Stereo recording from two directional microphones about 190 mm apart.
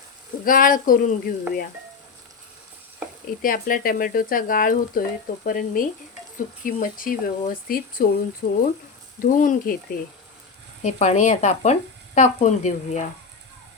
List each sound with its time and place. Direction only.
0.4 s speech: 45° left (ahead or behind)
3.4 s speech: 45° left (ahead or behind)